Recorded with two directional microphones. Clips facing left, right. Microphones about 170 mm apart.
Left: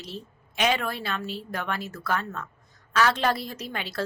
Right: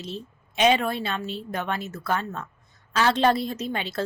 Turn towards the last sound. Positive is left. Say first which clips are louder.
# right 4 dB
turn(degrees=-25)  # may be behind; listen again after turning